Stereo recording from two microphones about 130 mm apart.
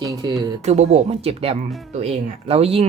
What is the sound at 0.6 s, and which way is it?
Speech, 60° right (ahead or behind).